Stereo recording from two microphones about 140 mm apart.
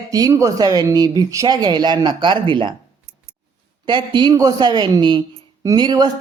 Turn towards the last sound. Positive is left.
turn(degrees=-30)  # may be behind; listen again after turning